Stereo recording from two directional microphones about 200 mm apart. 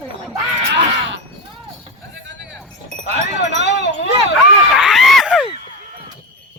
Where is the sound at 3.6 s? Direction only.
60° left (ahead or behind).